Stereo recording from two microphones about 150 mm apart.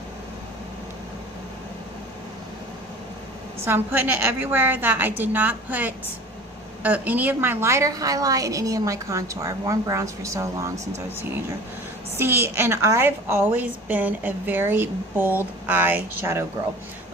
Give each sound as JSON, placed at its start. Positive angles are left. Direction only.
{"t": 3.6, "sound": "a woman's voice", "side_deg": -15}
{"t": 12.1, "sound": "a woman's voice", "side_deg": -15}